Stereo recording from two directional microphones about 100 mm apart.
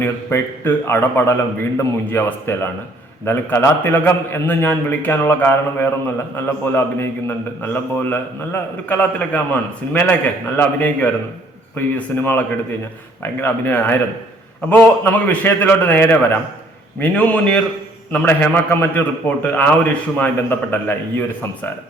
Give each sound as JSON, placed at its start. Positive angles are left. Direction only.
{"t": 0.0, "sound": "a man's voice", "side_deg": 25}